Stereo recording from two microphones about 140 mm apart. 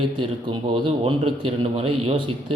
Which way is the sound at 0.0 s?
35° right (ahead or behind).